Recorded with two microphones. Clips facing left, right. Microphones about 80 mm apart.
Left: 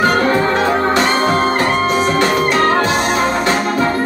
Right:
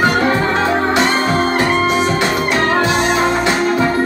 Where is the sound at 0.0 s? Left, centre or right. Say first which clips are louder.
Left 1 dB; left.